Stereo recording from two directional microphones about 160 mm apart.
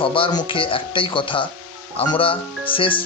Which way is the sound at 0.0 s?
35° left (ahead or behind).